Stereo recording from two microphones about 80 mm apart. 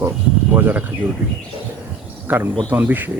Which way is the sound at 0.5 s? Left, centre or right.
Right.